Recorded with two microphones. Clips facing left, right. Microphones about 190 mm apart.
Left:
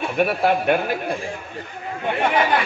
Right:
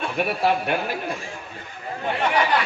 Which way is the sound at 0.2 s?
50° left (ahead or behind).